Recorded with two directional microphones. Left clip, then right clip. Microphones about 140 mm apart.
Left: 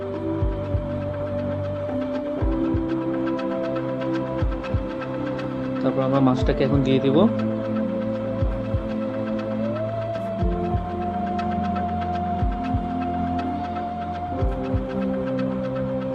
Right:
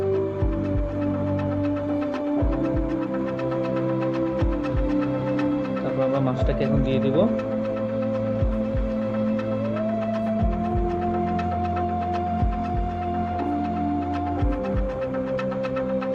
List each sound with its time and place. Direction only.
6.6 s speech: 90° left